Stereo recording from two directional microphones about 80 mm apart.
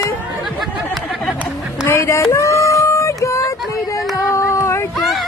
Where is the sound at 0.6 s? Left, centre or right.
Centre.